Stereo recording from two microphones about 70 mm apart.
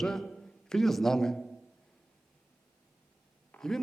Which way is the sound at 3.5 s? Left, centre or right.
Centre.